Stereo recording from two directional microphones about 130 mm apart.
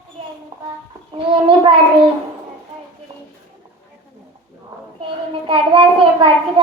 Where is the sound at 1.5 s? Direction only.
40° right (ahead or behind).